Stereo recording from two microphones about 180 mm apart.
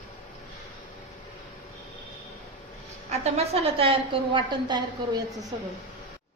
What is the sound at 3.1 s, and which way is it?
A woman's voice, 35° right (ahead or behind).